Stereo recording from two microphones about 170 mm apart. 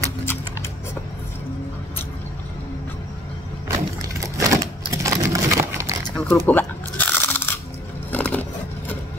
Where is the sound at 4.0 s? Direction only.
20° right (ahead or behind).